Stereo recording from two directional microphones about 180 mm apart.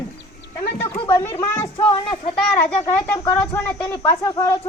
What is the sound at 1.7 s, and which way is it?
Speech, 30° left (ahead or behind).